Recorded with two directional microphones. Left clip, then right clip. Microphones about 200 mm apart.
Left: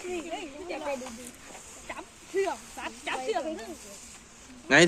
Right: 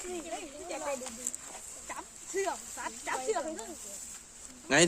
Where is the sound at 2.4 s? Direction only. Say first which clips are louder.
Left 2 dB; 10° right (ahead or behind).